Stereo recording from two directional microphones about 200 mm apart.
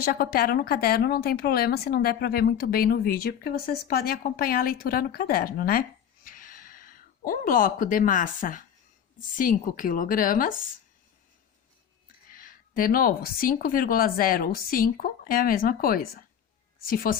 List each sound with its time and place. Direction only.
0.0 s speech: 50° left (ahead or behind)
6.2 s a sound: 45° left (ahead or behind)
9.1 s speech: 45° left (ahead or behind)
12.3 s speech: 45° left (ahead or behind)